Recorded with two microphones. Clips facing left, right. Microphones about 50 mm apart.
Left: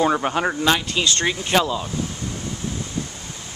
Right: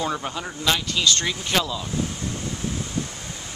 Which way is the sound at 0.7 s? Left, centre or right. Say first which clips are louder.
Left 2 dB; left.